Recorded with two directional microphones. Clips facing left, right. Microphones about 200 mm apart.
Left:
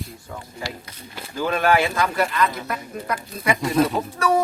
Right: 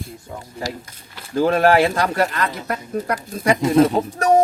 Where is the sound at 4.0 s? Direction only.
25° right (ahead or behind).